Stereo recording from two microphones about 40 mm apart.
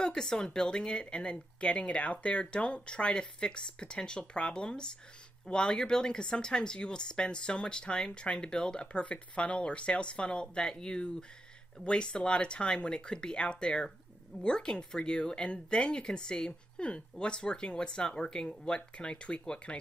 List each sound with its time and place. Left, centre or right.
0.0 s speech: centre